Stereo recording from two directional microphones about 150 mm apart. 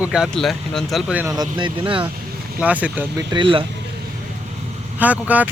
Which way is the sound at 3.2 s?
30° right (ahead or behind).